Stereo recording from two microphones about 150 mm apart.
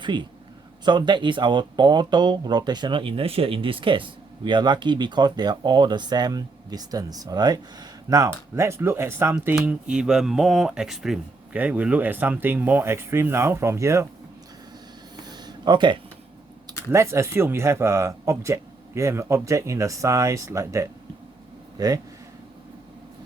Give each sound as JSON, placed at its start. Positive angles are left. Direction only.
{"t": 0.0, "sound": "speech", "side_deg": -30}
{"t": 15.1, "sound": "a sound", "side_deg": -30}
{"t": 16.9, "sound": "speech", "side_deg": -20}